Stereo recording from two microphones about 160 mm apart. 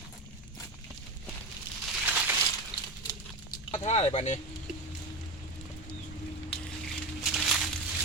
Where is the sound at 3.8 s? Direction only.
45° left (ahead or behind).